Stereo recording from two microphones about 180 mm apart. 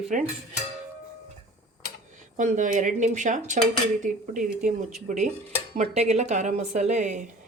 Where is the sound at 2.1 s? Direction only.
45° right (ahead or behind).